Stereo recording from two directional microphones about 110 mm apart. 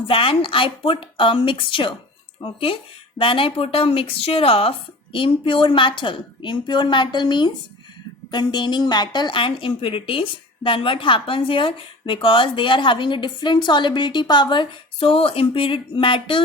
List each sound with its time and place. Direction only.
0.1 s a woman's voice: 55° left (ahead or behind)
5.1 s a woman's voice: 50° left (ahead or behind)